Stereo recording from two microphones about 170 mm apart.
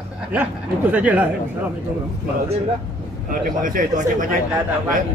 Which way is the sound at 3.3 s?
55° right (ahead or behind).